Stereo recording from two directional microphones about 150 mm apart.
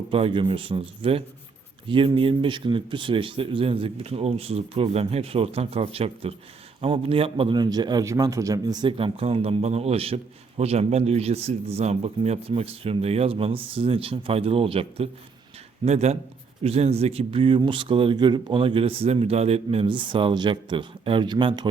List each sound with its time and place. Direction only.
0.1 s a man's voice: 35° right (ahead or behind)